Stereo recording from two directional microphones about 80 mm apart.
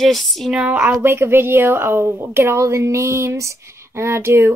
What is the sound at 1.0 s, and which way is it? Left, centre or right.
Speech, right.